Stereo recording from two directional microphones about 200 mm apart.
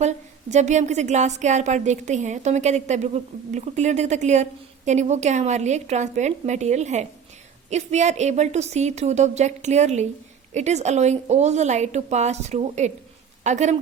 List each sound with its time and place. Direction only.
0.5 s a woman's voice: 35° right (ahead or behind)